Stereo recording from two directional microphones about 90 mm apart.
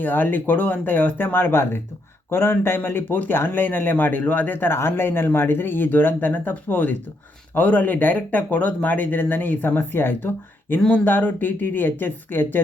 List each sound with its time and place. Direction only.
0.0 s speech: 20° left (ahead or behind)